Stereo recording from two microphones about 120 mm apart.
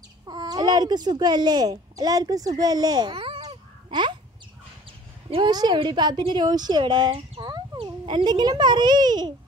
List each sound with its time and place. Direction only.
0.3 s speech: 35° right (ahead or behind)
5.5 s a woman's voice: 35° right (ahead or behind)